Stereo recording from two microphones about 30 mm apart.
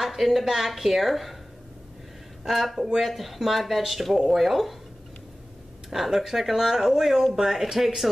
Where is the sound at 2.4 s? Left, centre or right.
Centre.